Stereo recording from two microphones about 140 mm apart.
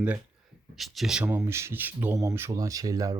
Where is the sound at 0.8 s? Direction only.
Centre (ahead or behind).